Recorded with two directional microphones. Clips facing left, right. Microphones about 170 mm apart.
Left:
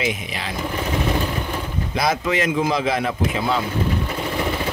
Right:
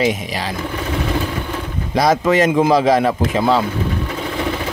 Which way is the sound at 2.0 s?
40° right (ahead or behind).